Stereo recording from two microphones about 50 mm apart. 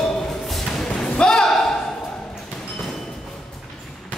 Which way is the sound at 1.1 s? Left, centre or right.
Centre.